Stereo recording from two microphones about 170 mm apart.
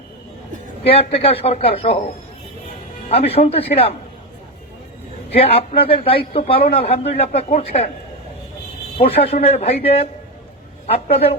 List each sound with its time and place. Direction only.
0.9 s a man's voice: 35° left (ahead or behind)
3.1 s a man's voice: 35° left (ahead or behind)
5.3 s a man's voice: 35° left (ahead or behind)
9.0 s a man's voice: 35° left (ahead or behind)